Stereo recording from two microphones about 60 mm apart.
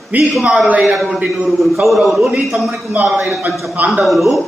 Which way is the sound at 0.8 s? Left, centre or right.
Centre.